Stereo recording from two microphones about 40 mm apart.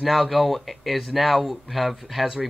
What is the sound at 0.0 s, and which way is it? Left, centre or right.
A man's voice, centre.